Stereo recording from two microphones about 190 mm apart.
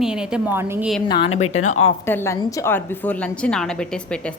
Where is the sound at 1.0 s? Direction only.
20° left (ahead or behind).